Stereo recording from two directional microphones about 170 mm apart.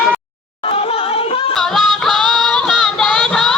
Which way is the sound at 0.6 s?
35° left (ahead or behind).